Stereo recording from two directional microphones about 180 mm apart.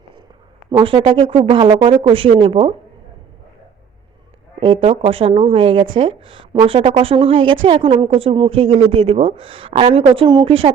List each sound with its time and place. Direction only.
0.7 s a woman's voice: 30° right (ahead or behind)
4.8 s a woman's voice: 30° right (ahead or behind)